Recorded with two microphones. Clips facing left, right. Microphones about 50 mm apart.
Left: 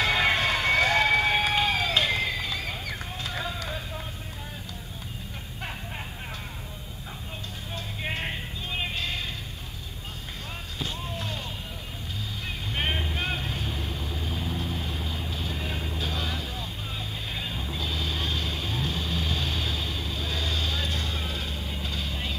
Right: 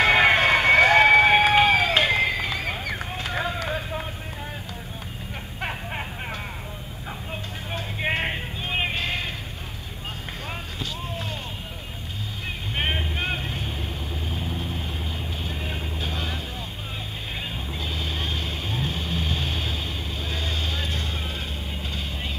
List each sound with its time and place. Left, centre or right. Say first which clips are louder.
0.0 s run: right 6 dB; right
5.6 s a sound: right 6 dB; right
7.7 s music: right 7 dB; right
12.7 s vehicle: right 2 dB; centre
17.6 s vehicle: right 1 dB; right